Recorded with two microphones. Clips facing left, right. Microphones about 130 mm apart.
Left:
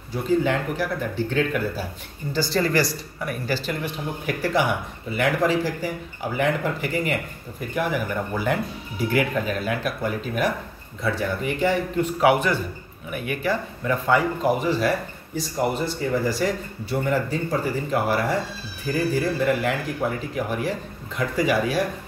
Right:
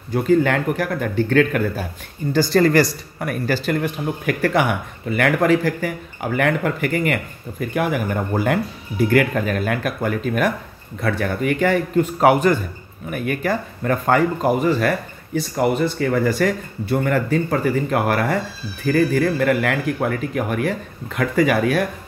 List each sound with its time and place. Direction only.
0.1 s speech: 60° right (ahead or behind)